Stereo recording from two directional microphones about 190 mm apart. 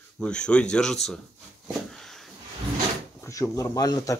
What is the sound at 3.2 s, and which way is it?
Speech, 15° left (ahead or behind).